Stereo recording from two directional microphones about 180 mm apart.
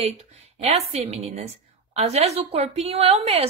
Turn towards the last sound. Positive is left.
turn(degrees=-35)  # may be behind; listen again after turning